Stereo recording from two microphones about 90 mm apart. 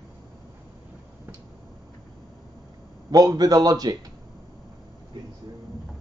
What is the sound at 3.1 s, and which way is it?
Speech, 45° right (ahead or behind).